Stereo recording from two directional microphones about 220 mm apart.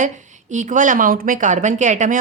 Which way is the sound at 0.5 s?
35° right (ahead or behind).